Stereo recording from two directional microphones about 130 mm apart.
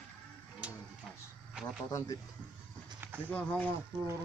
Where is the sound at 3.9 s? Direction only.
40° right (ahead or behind).